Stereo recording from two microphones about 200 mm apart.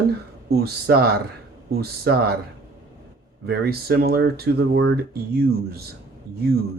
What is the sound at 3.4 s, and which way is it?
Speech, 50° right (ahead or behind).